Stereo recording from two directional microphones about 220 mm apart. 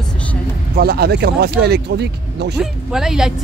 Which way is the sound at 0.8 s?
45° right (ahead or behind).